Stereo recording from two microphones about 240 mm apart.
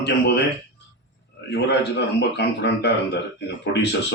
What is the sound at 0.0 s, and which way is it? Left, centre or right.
Speech, left.